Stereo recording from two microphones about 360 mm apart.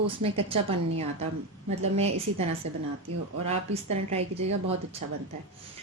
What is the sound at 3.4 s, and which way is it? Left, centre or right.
Speech, centre.